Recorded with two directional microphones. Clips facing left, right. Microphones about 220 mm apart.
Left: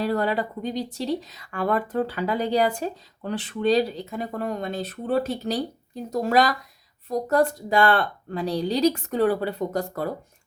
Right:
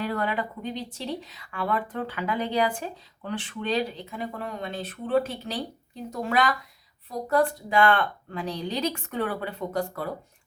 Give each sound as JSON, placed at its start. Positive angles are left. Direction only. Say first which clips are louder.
{"t": 0.0, "sound": "speech", "louder": "left 4 dB", "side_deg": 35}